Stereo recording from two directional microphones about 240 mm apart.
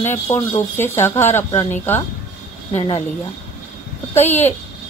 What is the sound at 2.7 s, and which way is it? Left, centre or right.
Speech, left.